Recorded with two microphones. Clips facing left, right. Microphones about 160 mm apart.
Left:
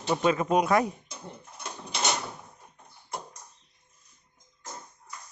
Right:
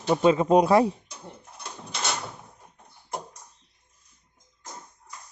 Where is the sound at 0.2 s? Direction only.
25° right (ahead or behind).